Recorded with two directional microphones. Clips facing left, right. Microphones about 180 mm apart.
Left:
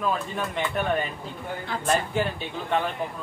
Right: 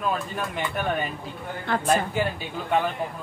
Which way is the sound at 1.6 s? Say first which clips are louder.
Right 3 dB; 60° right (ahead or behind).